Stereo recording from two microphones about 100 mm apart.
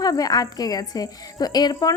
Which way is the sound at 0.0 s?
40° left (ahead or behind).